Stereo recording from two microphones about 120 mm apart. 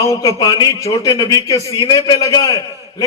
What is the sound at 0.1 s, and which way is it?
A man's voice, 30° left (ahead or behind).